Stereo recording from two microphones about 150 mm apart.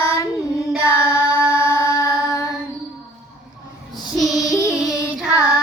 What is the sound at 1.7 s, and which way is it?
Mantra, 20° left (ahead or behind).